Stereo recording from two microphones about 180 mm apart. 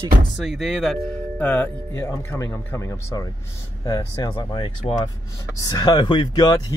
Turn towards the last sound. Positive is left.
turn(degrees=25)  # may be behind; listen again after turning